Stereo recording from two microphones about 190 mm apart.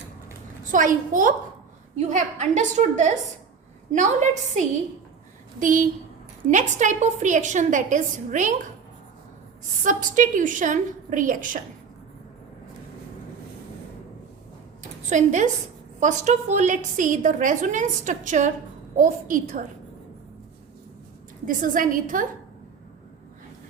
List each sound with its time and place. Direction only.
0.7 s a woman's voice: 45° right (ahead or behind)
9.8 s a woman's voice: 45° right (ahead or behind)
15.1 s a woman's voice: 40° right (ahead or behind)
21.4 s a woman's voice: 45° right (ahead or behind)